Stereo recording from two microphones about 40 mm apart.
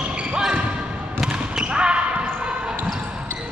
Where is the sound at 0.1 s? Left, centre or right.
Right.